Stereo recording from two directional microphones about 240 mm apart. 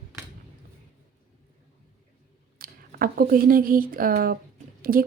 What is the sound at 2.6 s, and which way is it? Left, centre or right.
Speech, right.